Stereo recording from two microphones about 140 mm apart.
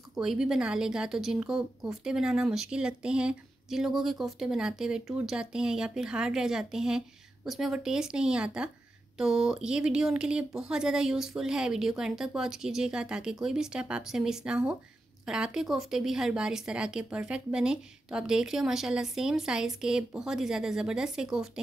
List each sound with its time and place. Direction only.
0.1 s a woman's voice: 5° right (ahead or behind)